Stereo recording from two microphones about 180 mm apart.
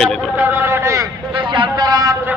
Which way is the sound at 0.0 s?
Centre (ahead or behind).